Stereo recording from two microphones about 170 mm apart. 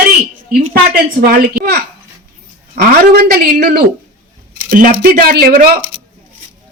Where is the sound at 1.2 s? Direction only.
65° right (ahead or behind).